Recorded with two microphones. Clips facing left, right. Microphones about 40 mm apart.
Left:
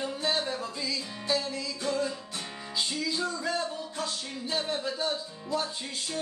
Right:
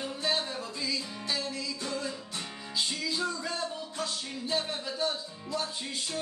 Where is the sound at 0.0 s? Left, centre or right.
Centre.